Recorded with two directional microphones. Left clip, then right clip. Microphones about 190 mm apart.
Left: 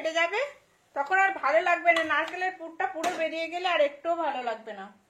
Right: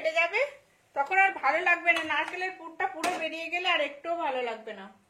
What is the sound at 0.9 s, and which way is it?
Speech, 20° left (ahead or behind).